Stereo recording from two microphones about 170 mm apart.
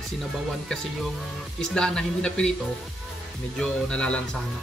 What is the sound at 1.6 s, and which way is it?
Speech, 5° left (ahead or behind).